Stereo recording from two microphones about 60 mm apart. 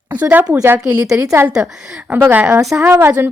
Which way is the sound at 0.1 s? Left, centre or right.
Right.